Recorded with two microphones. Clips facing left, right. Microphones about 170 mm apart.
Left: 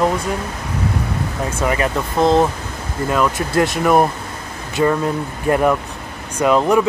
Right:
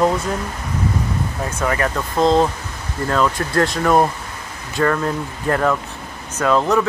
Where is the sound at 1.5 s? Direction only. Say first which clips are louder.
Left 1 dB; 20° left (ahead or behind).